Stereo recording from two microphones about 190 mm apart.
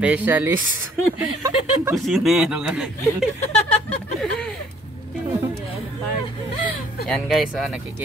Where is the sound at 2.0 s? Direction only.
Centre (ahead or behind).